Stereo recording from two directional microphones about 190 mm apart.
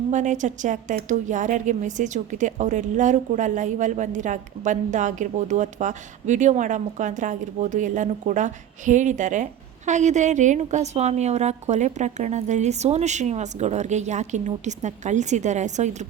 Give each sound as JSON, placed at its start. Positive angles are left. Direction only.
{"t": 0.1, "sound": "a woman's voice", "side_deg": -40}